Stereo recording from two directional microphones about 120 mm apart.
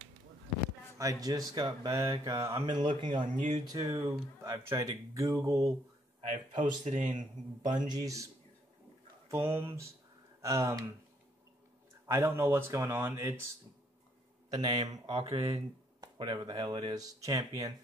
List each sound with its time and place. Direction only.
0.9 s speech: 30° right (ahead or behind)
2.6 s speech: 40° right (ahead or behind)
6.2 s a man's voice: 85° right
7.9 s speech: 30° right (ahead or behind)
9.3 s speech: 20° right (ahead or behind)
12.1 s speech: 20° right (ahead or behind)
14.5 s a man's voice: 40° right (ahead or behind)
15.0 s speech: 50° right (ahead or behind)
16.0 s speech: 40° right (ahead or behind)